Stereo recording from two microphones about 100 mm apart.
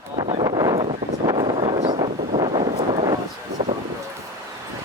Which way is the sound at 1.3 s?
75° right (ahead or behind).